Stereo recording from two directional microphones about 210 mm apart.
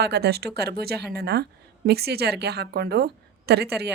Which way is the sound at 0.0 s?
50° right (ahead or behind).